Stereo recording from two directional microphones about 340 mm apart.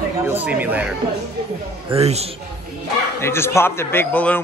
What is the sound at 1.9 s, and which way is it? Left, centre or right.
Speech, centre.